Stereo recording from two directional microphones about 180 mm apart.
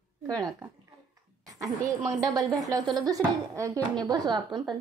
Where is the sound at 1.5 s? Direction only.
20° right (ahead or behind).